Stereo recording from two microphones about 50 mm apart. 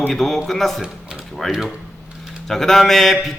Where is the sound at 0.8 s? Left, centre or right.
Centre.